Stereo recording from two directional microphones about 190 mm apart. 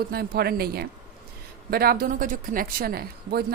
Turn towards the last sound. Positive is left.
turn(degrees=-55)  # may be behind; listen again after turning